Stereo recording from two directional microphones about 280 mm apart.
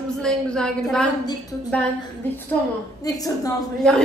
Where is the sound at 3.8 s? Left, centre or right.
Centre.